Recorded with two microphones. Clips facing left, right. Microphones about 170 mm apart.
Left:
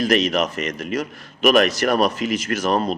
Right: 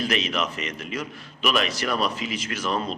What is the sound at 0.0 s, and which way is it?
A man's voice, 40° left (ahead or behind).